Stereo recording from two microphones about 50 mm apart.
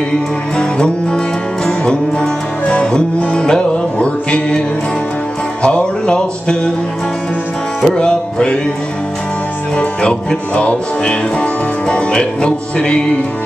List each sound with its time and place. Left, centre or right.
0.6 s music: centre
5.6 s music: left
7.8 s music: centre
9.8 s music: left